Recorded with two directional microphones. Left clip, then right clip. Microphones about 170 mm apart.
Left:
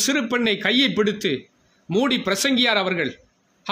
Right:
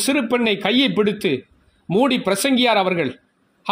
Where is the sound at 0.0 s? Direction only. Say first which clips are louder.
Right 2 dB; 25° right (ahead or behind).